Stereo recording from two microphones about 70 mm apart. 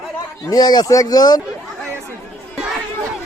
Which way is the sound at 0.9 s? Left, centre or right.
Left.